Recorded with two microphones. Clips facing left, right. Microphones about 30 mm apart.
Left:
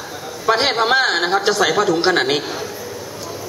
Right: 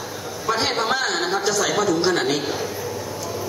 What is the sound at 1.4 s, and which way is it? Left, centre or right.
Speech, left.